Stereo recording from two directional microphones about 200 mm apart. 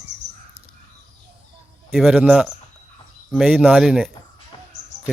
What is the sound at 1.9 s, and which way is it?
Speech, 5° right (ahead or behind).